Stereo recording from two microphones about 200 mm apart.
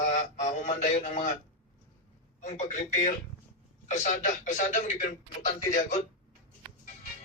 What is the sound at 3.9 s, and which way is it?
Speech, 35° left (ahead or behind).